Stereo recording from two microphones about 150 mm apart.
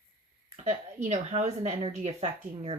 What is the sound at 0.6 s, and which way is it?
A woman's voice, 50° right (ahead or behind).